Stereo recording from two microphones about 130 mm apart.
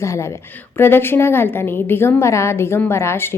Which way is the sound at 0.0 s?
20° left (ahead or behind).